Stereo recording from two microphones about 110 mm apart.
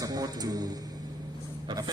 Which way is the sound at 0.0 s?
35° right (ahead or behind).